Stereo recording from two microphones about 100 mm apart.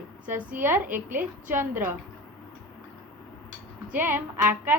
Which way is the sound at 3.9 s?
20° right (ahead or behind).